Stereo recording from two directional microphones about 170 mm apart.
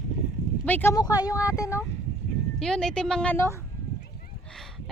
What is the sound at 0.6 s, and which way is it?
Speech, 10° left (ahead or behind).